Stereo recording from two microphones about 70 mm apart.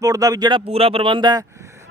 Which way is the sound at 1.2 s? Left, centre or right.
Right.